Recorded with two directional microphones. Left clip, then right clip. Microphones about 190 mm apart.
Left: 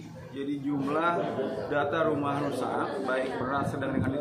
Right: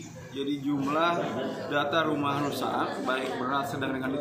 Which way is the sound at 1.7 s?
10° left (ahead or behind).